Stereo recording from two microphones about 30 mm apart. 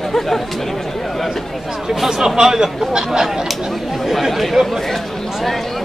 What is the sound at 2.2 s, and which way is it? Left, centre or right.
Speech, right.